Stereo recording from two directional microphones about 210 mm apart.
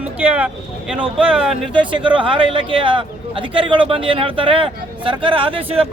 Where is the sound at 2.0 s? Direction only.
25° right (ahead or behind).